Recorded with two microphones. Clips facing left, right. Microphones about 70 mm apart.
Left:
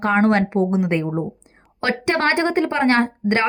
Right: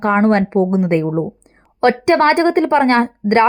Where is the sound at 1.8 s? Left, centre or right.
Right.